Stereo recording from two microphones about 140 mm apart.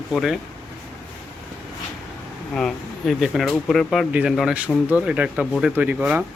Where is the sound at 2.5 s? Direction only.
5° left (ahead or behind).